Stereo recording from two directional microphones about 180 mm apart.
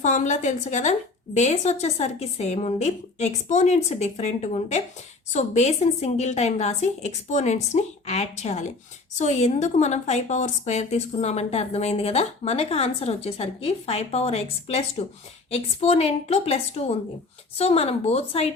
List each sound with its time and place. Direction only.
0.0 s a woman's voice: 40° left (ahead or behind)